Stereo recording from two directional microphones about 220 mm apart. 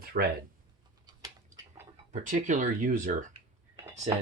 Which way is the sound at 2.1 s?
35° right (ahead or behind).